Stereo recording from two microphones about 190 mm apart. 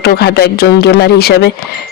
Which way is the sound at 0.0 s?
55° left (ahead or behind).